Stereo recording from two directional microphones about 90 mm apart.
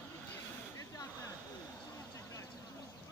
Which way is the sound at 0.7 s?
40° left (ahead or behind).